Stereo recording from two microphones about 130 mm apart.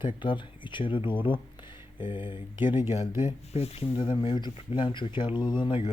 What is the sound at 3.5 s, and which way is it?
Speech, 50° left (ahead or behind).